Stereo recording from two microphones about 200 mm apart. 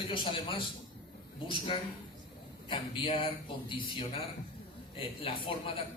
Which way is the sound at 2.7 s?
25° left (ahead or behind).